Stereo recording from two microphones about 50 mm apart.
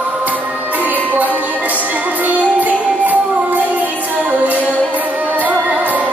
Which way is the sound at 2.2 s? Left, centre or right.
Right.